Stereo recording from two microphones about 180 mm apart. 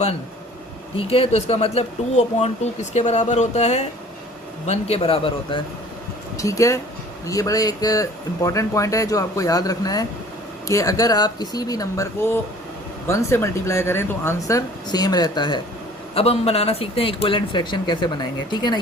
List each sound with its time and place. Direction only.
0.9 s speech: 30° left (ahead or behind)
6.3 s speech: 15° left (ahead or behind)